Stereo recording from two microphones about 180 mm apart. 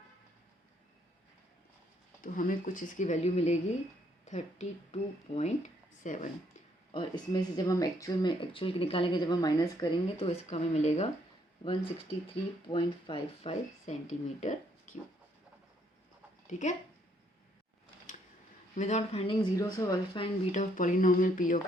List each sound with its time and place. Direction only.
2.2 s speech: 50° left (ahead or behind)
6.9 s speech: 25° left (ahead or behind)
12.6 s speech: 30° left (ahead or behind)
16.5 s speech: 40° left (ahead or behind)
18.8 s speech: 40° left (ahead or behind)
20.5 s speech: 45° left (ahead or behind)